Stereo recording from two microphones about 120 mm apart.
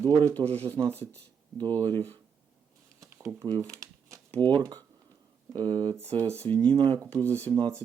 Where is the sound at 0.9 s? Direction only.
15° left (ahead or behind).